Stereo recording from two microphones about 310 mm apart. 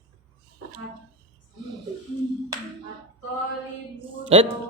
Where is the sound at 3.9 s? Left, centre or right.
Centre.